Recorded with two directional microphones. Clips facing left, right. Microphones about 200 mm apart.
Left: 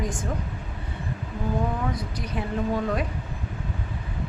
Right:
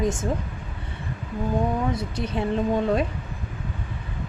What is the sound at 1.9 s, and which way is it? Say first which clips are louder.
Speech: right 4 dB; 25° right (ahead or behind).